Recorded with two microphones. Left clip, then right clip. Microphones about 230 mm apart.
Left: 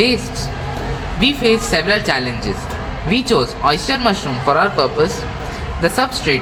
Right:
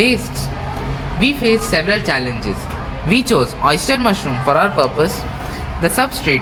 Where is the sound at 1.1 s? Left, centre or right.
Centre.